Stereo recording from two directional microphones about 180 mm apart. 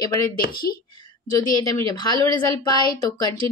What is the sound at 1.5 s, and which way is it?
Speech, 20° left (ahead or behind).